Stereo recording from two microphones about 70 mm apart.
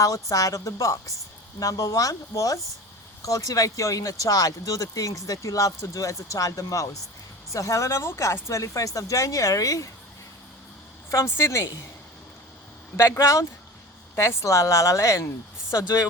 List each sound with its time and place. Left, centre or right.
0.0 s speech: left
11.1 s speech: left
13.0 s speech: left